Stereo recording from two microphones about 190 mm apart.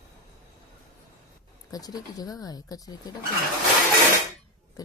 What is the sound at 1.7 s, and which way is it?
Speech, 20° left (ahead or behind).